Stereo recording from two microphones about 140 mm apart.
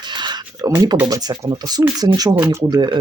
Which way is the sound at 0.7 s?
25° right (ahead or behind).